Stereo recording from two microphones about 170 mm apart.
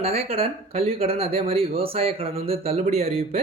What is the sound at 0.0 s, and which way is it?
Speech, 35° right (ahead or behind).